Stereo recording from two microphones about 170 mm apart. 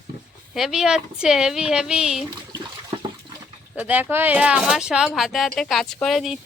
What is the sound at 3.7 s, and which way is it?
A woman's voice, 10° right (ahead or behind).